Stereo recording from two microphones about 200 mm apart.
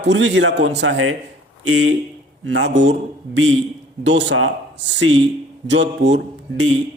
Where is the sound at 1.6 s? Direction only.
80° right.